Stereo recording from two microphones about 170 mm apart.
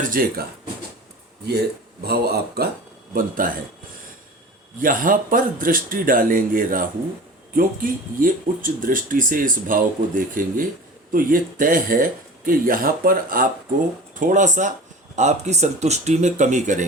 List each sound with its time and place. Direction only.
0.0 s speech: 55° right (ahead or behind)
2.0 s speech: 70° right (ahead or behind)
3.2 s speech: 55° right (ahead or behind)
4.8 s speech: 55° right (ahead or behind)